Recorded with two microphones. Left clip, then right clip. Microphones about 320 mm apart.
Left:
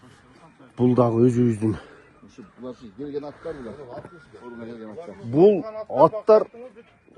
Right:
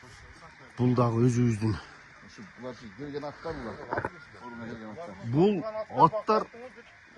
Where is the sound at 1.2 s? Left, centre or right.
Centre.